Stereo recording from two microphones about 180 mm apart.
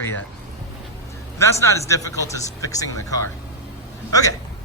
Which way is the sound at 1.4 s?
15° left (ahead or behind).